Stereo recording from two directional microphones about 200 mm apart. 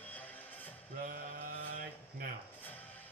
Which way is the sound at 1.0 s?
45° right (ahead or behind).